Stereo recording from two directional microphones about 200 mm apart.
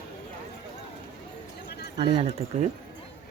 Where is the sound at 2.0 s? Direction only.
25° right (ahead or behind).